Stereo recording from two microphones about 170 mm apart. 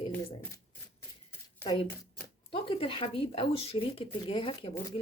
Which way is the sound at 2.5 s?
30° left (ahead or behind).